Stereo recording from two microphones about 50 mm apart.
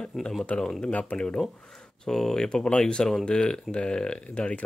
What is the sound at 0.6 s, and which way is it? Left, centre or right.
Speech, centre.